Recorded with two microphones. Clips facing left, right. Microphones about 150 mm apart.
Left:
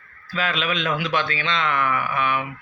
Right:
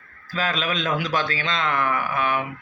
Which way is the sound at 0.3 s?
40° right (ahead or behind).